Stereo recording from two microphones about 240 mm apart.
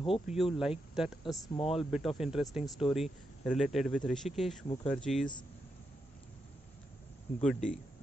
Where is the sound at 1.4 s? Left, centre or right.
Left.